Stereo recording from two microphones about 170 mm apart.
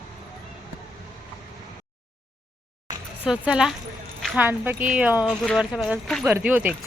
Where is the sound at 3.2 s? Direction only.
5° right (ahead or behind).